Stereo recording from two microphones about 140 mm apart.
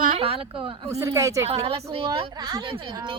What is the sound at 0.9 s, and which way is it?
Speech, 20° right (ahead or behind).